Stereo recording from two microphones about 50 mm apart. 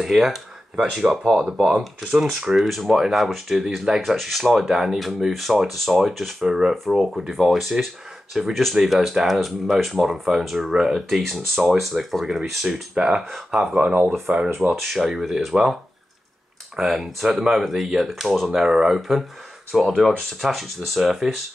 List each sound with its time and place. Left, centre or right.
0.0 s speech: centre
2.6 s speech: centre
12.9 s speech: centre
13.3 s speech: centre
14.3 s speech: right
14.9 s speech: centre